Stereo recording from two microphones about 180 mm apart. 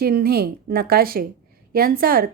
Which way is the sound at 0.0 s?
60° right (ahead or behind).